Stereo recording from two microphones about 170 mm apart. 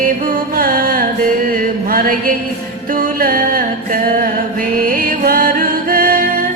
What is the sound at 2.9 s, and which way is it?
Music, 55° right (ahead or behind).